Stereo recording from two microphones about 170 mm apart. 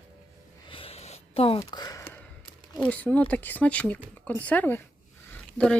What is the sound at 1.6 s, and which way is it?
Speech, 25° left (ahead or behind).